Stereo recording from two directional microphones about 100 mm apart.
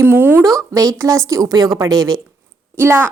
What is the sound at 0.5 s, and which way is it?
Speech, 35° right (ahead or behind).